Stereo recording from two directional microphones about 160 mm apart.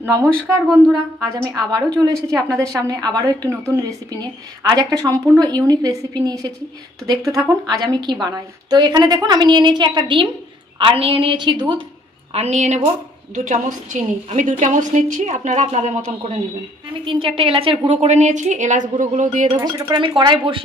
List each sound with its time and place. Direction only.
0.2 s speech: 5° left (ahead or behind)
1.3 s a woman's voice: 20° right (ahead or behind)
12.3 s a woman's voice: 45° right (ahead or behind)
17.0 s a woman's voice: 35° right (ahead or behind); by 19.4 s 50° right (ahead or behind)
19.9 s a woman's voice: 30° right (ahead or behind)